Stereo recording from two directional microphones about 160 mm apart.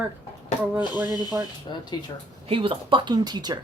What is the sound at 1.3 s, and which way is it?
Speech, 20° right (ahead or behind).